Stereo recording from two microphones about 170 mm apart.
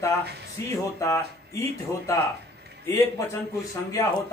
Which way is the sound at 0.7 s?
20° left (ahead or behind).